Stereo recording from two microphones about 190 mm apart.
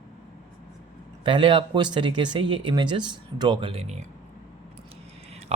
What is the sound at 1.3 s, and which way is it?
Speech, 25° right (ahead or behind).